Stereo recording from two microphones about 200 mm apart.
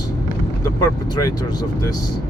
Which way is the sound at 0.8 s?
20° left (ahead or behind).